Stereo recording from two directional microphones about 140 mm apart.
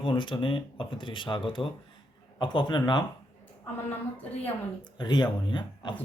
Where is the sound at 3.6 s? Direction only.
15° left (ahead or behind).